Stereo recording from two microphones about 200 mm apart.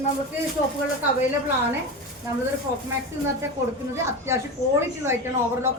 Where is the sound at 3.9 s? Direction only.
15° right (ahead or behind).